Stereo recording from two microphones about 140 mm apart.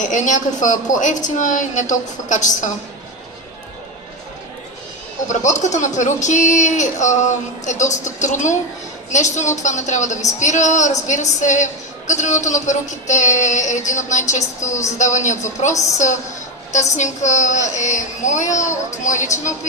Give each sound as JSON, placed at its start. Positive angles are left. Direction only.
{"t": 0.0, "sound": "a woman's voice", "side_deg": 60}
{"t": 5.3, "sound": "a woman's voice", "side_deg": 60}
{"t": 16.7, "sound": "a woman's voice", "side_deg": 60}